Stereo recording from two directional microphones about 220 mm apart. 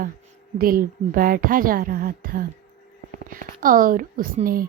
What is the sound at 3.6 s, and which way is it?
Speech, 40° right (ahead or behind).